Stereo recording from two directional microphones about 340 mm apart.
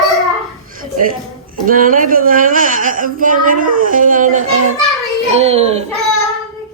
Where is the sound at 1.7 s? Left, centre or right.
Right.